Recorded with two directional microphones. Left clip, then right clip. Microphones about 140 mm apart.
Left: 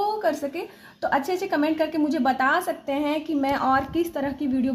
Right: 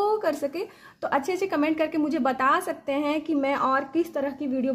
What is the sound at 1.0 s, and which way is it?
A woman's voice, 15° right (ahead or behind).